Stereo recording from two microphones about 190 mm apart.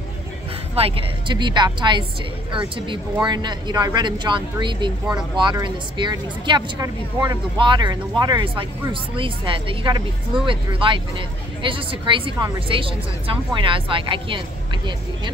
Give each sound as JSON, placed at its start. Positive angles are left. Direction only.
{"t": 0.7, "sound": "speech", "side_deg": -30}
{"t": 3.3, "sound": "speech", "side_deg": -25}